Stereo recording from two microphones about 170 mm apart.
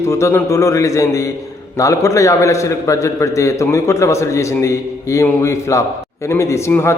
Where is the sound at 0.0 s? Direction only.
15° left (ahead or behind).